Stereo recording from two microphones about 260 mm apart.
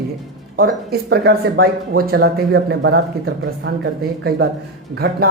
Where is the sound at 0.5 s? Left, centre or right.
Right.